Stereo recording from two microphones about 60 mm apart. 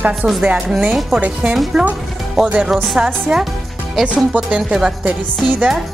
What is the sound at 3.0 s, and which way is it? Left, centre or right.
Speech, centre.